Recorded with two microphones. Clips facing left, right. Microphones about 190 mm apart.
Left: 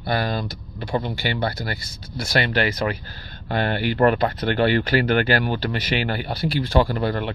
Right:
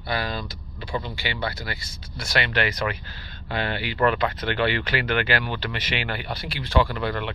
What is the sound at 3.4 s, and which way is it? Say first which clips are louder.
Speech: left 5 dB; 50° left (ahead or behind).